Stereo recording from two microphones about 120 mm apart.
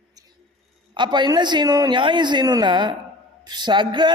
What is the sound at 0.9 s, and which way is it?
A man's voice, 40° right (ahead or behind).